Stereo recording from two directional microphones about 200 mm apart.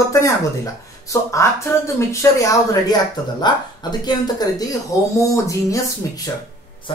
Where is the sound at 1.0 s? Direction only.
15° left (ahead or behind).